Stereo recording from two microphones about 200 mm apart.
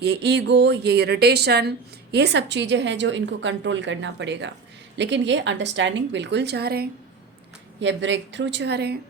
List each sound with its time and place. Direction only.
0.0 s a woman's voice: 60° right (ahead or behind)
7.8 s a woman's voice: 65° right (ahead or behind)